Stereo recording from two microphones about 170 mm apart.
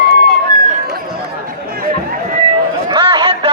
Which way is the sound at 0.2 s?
60° right (ahead or behind).